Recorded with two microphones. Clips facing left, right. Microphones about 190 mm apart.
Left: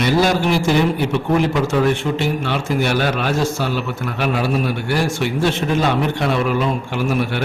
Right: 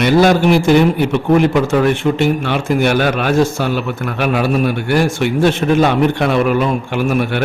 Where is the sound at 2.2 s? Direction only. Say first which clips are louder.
Right 5 dB; 55° right (ahead or behind).